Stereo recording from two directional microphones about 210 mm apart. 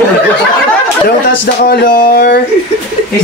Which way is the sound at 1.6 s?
40° left (ahead or behind).